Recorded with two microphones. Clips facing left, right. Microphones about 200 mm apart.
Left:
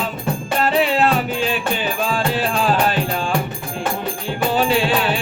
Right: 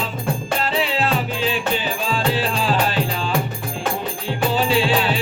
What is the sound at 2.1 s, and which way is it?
Music, 50° left (ahead or behind).